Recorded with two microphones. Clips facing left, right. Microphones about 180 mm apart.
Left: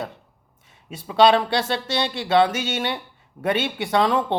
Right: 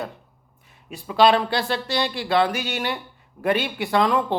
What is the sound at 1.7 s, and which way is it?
Speech, 25° left (ahead or behind).